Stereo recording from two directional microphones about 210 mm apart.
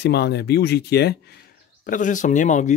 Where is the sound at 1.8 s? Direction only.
40° left (ahead or behind).